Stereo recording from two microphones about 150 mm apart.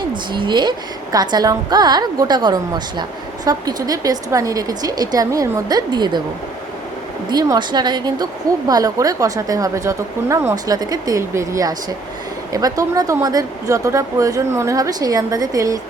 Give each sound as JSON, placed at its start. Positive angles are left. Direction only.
{"t": 0.1, "sound": "a woman's voice", "side_deg": -30}
{"t": 7.3, "sound": "a woman's voice", "side_deg": -25}